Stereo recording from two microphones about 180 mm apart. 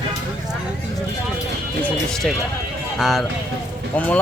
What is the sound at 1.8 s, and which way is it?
Music, 5° left (ahead or behind).